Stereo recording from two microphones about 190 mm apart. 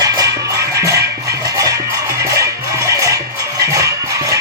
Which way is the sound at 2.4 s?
15° right (ahead or behind).